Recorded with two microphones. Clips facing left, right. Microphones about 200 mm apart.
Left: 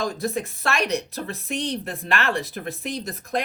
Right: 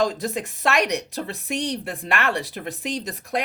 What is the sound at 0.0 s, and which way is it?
Speech, 15° right (ahead or behind).